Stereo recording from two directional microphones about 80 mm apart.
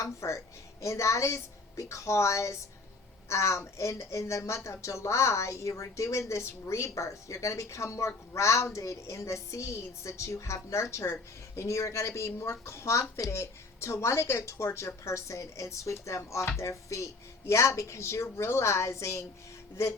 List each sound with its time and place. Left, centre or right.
0.0 s speech: left